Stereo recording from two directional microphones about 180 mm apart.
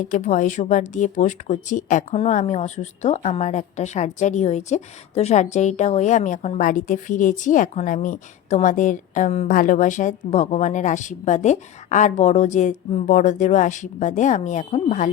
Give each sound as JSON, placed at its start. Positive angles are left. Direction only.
{"t": 0.0, "sound": "speech", "side_deg": 45}